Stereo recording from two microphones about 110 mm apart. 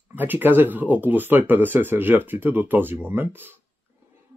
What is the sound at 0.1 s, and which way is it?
Speech, 15° right (ahead or behind).